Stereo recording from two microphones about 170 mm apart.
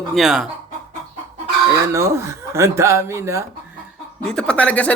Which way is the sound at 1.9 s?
15° right (ahead or behind).